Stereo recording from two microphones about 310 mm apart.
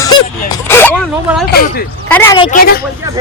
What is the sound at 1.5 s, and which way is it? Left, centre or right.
Speech, left.